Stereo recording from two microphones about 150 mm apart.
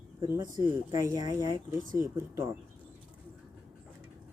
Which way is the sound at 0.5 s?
25° right (ahead or behind).